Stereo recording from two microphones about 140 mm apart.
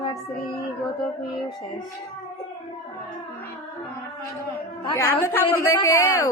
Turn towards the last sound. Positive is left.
turn(degrees=20)  # may be behind; listen again after turning